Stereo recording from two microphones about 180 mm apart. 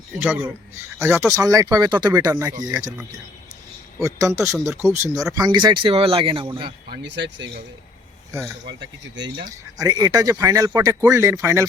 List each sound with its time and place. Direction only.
0.2 s speech: 10° right (ahead or behind)
4.0 s speech: 20° right (ahead or behind)
6.9 s speech: 75° right (ahead or behind)
8.3 s speech: 15° right (ahead or behind)